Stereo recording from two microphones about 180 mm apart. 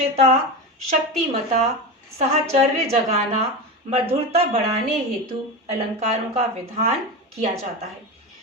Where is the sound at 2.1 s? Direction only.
35° right (ahead or behind).